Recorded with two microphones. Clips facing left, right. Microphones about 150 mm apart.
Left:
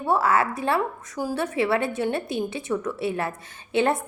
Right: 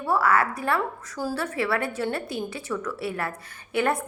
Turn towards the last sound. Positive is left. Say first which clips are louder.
# left 2 dB
turn(degrees=25)  # may be behind; listen again after turning